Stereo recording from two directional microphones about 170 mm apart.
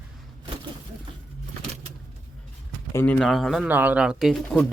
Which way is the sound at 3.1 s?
Centre (ahead or behind).